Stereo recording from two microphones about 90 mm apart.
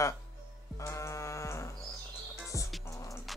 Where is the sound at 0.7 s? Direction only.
35° left (ahead or behind).